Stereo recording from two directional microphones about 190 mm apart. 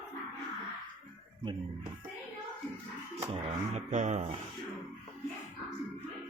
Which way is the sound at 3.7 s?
40° right (ahead or behind).